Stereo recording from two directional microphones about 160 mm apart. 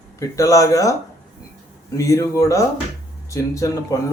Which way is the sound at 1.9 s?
20° left (ahead or behind).